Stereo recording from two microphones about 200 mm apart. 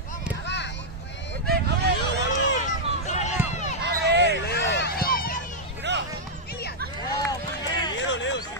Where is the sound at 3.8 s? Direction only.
55° right (ahead or behind).